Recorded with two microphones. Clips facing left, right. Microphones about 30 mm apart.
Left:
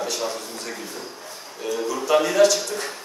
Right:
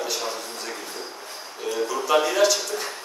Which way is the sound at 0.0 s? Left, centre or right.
Centre.